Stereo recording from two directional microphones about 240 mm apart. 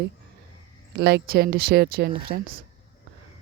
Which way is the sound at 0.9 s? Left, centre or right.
Right.